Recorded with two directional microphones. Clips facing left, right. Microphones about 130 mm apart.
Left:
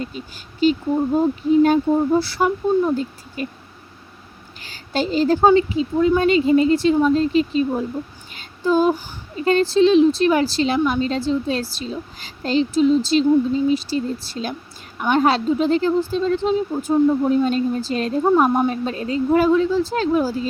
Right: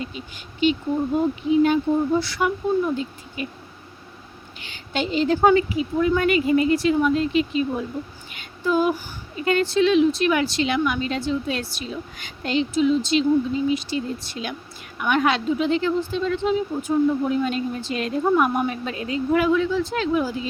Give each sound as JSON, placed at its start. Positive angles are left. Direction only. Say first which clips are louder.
{"t": 0.6, "sound": "a woman's voice", "louder": "left 3 dB", "side_deg": 40}
{"t": 4.6, "sound": "a woman's voice", "louder": "left 3 dB", "side_deg": 35}
{"t": 8.3, "sound": "child singing", "louder": "left 4 dB", "side_deg": 30}
{"t": 9.4, "sound": "a woman's voice", "louder": "left 4 dB", "side_deg": 30}